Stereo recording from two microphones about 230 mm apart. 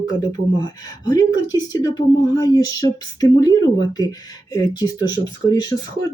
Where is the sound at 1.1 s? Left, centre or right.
Centre.